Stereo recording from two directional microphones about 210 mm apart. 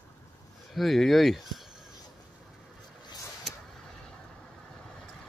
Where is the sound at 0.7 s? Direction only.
Centre (ahead or behind).